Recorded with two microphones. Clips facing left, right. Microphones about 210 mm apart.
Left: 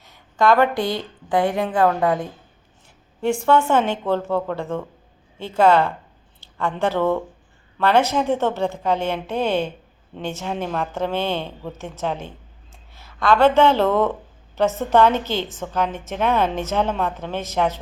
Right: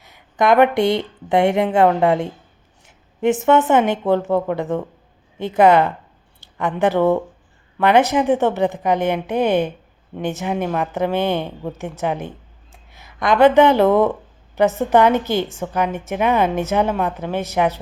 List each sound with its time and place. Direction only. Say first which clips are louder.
0.0 s a woman's voice: right 1 dB; 15° right (ahead or behind)